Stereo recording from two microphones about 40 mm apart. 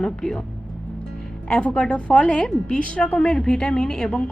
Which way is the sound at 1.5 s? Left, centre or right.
Left.